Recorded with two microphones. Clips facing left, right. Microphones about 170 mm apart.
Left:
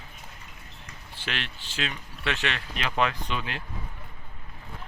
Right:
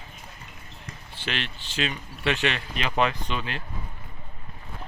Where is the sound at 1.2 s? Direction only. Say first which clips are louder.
Right 3 dB; centre (ahead or behind).